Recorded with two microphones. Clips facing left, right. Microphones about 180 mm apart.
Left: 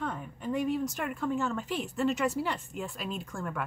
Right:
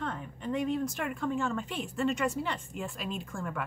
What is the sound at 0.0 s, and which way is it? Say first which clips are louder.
Speech: left 1 dB; 5° left (ahead or behind).